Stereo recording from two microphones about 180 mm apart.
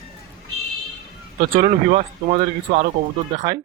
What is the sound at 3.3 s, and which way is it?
Speech, 25° right (ahead or behind).